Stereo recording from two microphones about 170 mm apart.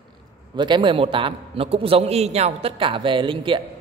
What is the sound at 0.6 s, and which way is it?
A man's voice, 25° right (ahead or behind).